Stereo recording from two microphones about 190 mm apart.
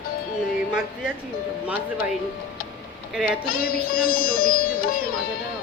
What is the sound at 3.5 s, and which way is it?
Music, 50° left (ahead or behind).